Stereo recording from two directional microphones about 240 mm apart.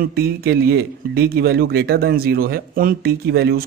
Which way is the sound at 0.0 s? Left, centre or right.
Right.